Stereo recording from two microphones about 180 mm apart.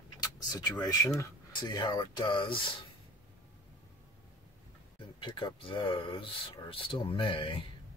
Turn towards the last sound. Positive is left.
turn(degrees=30)  # may be behind; listen again after turning